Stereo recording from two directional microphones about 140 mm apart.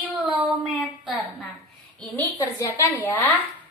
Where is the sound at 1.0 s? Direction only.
Centre (ahead or behind).